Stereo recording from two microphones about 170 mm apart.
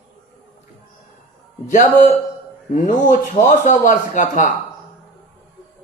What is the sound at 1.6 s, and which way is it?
Speech, 45° left (ahead or behind).